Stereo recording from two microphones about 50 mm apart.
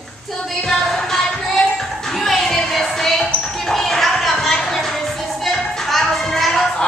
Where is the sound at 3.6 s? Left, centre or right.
Centre.